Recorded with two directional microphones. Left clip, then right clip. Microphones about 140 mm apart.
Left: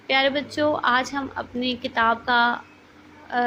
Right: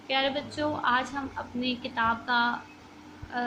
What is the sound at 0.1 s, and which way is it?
A woman's voice, 45° left (ahead or behind).